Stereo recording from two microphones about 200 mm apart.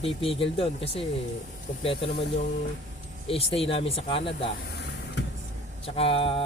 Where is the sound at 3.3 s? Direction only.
30° left (ahead or behind).